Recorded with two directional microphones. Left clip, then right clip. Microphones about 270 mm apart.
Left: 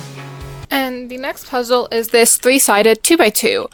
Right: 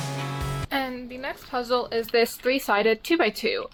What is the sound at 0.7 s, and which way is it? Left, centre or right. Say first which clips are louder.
A woman's voice: left 11 dB; left.